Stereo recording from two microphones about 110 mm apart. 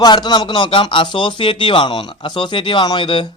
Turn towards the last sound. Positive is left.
turn(degrees=45)  # may be behind; listen again after turning